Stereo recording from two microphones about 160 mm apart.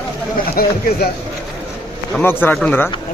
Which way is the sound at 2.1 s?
10° left (ahead or behind).